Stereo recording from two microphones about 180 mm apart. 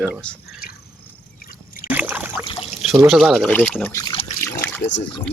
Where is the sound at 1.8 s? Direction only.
10° right (ahead or behind).